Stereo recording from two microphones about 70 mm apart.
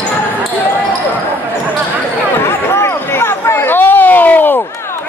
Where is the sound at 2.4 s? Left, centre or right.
Left.